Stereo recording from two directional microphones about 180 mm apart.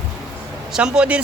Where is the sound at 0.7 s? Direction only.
5° right (ahead or behind).